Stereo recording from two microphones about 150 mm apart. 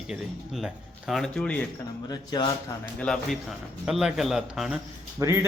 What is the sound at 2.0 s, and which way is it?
Speech, 30° left (ahead or behind).